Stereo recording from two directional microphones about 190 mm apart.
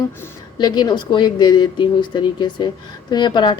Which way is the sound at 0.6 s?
20° left (ahead or behind).